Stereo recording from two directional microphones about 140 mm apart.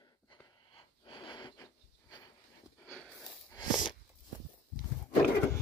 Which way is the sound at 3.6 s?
30° left (ahead or behind).